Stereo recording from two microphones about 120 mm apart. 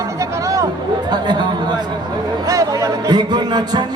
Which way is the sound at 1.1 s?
40° right (ahead or behind).